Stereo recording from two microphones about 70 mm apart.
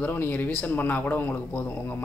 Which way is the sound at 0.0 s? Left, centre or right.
Left.